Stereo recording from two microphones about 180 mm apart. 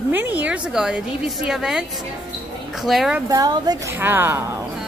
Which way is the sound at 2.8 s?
Centre (ahead or behind).